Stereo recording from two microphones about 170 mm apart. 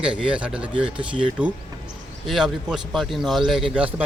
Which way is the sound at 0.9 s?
30° right (ahead or behind).